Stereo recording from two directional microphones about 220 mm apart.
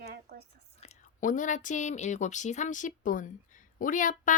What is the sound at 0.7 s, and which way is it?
Speech, 30° left (ahead or behind).